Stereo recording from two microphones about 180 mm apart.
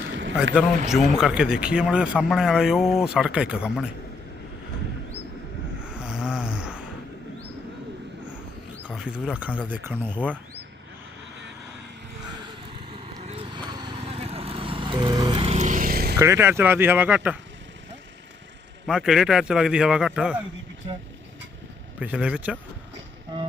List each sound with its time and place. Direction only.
0.0 s a sound: 90° right
0.9 s speech: centre (ahead or behind)
5.8 s snoring: 5° right (ahead or behind)
8.8 s speech: 5° right (ahead or behind)
13.1 s vehicle: 35° right (ahead or behind); by 16.1 s 55° right (ahead or behind)
16.1 s speech: 15° right (ahead or behind)
18.9 s speech: 5° right (ahead or behind)
22.0 s speech: 5° right (ahead or behind)